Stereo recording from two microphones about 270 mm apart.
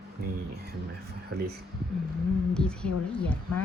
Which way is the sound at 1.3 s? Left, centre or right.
Right.